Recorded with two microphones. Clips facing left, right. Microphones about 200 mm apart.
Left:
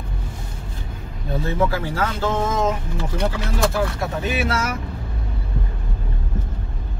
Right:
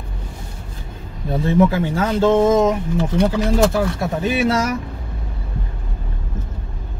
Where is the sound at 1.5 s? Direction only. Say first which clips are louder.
Right 7 dB; 25° right (ahead or behind).